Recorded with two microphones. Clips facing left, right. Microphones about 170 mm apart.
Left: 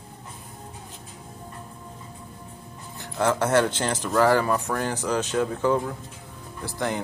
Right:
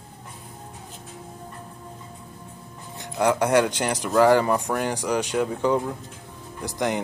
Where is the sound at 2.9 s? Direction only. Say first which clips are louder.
Right 2 dB; 15° right (ahead or behind).